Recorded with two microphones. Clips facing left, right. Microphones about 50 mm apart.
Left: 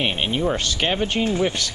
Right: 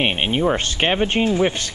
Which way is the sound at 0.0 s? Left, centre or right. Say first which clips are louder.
Right 3 dB; right.